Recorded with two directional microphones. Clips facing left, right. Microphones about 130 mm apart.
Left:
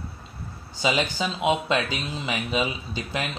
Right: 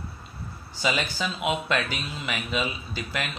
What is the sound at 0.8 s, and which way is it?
Speech, 20° left (ahead or behind).